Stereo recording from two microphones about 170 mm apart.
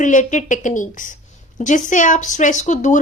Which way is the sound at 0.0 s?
45° left (ahead or behind).